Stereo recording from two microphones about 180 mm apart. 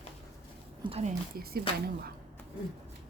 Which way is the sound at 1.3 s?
60° right (ahead or behind).